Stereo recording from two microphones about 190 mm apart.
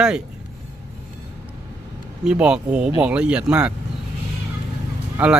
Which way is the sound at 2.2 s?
5° right (ahead or behind).